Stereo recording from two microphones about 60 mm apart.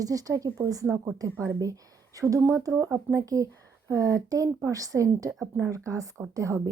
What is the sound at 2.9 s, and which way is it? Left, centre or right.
A woman's voice, right.